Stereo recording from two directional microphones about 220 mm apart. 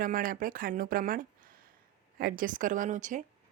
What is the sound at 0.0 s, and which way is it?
Speech, 40° right (ahead or behind).